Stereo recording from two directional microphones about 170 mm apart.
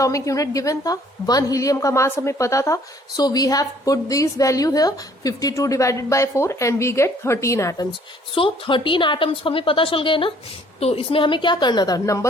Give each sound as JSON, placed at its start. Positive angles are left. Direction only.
{"t": 0.0, "sound": "a woman's voice", "side_deg": 20}
{"t": 8.4, "sound": "a woman's voice", "side_deg": 30}